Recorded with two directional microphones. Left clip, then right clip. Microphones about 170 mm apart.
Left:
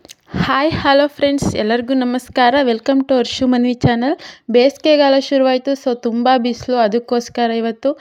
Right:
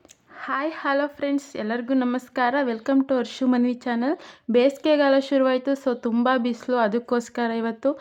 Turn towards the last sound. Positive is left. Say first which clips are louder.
# left 7 dB
turn(degrees=10)  # may be behind; listen again after turning